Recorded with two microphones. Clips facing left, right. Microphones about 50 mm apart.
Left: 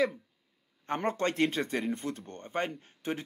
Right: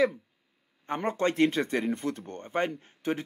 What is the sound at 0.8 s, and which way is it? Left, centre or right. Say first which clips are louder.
A man's voice: right 2 dB; centre.